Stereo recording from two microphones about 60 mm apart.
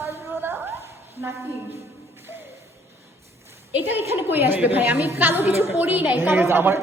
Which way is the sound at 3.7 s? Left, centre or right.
Right.